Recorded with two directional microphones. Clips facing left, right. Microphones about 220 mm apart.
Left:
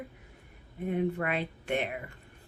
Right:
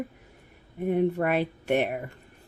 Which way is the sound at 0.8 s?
45° right (ahead or behind).